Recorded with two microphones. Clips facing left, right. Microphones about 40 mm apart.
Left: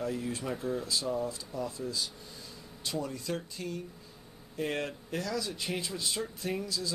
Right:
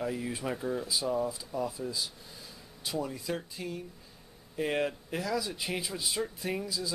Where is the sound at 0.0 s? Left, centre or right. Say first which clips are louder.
Right 1 dB; centre.